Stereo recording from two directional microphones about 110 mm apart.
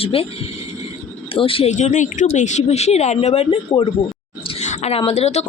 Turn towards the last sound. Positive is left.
turn(degrees=80)